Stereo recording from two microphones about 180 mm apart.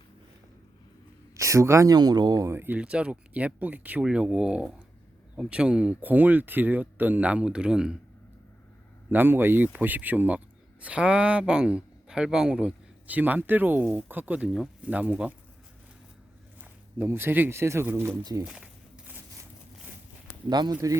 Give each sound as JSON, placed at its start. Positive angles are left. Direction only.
{"t": 1.4, "sound": "speech", "side_deg": -15}
{"t": 9.0, "sound": "speech", "side_deg": -10}
{"t": 16.6, "sound": "speech", "side_deg": -10}
{"t": 18.4, "sound": "walk", "side_deg": -5}
{"t": 20.5, "sound": "speech", "side_deg": -20}